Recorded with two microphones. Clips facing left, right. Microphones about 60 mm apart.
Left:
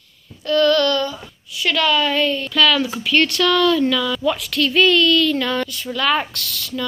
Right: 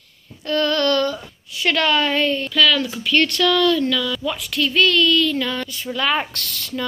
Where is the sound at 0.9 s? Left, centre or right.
Right.